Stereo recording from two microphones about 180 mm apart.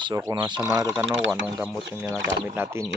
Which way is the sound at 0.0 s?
20° right (ahead or behind).